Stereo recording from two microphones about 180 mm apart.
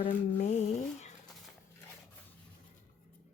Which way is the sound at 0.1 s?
45° left (ahead or behind).